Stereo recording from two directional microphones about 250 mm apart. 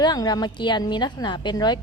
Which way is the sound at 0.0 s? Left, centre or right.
Centre.